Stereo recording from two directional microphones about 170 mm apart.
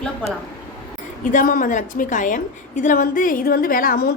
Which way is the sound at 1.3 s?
55° left (ahead or behind).